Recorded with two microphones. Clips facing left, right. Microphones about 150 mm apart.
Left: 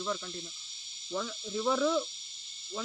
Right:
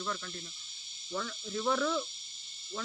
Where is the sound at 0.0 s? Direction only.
15° left (ahead or behind).